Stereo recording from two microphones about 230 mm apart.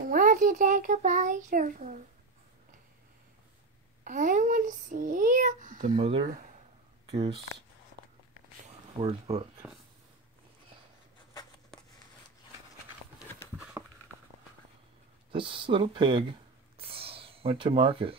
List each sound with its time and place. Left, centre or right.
0.0 s a child's voice: right
4.0 s a child's voice: right
8.6 s speech: right
13.8 s a sound: centre
15.3 s speech: right